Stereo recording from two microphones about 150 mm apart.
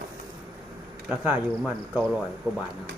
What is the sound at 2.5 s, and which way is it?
Speech, 20° right (ahead or behind).